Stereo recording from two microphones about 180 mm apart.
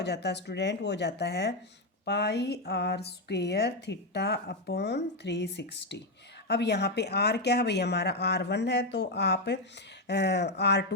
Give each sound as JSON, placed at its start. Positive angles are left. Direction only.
{"t": 0.0, "sound": "speech", "side_deg": 70}